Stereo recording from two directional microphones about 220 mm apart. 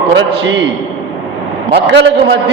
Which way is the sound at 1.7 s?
55° right (ahead or behind).